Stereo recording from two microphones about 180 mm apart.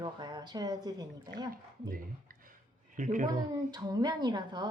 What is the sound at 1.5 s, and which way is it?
Speech, 55° right (ahead or behind).